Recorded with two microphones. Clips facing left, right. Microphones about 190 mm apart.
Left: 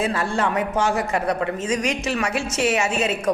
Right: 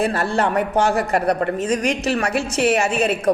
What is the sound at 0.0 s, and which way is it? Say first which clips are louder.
A woman's voice: right 3 dB; 65° right (ahead or behind).